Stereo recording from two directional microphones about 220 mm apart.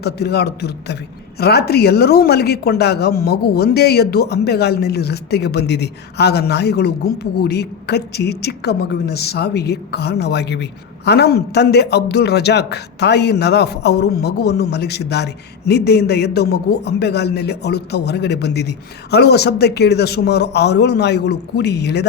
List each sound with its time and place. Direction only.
0.0 s speech: 50° left (ahead or behind)